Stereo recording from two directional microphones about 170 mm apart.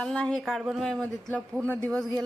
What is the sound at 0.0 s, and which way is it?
Speech, 5° left (ahead or behind).